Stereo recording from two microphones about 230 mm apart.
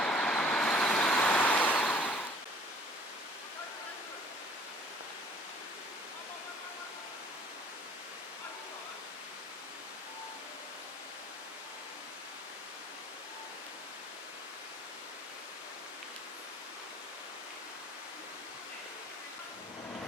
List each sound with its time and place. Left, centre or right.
0.0 s vehicle: centre